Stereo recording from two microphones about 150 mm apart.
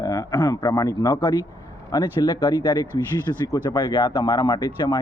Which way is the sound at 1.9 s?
30° left (ahead or behind).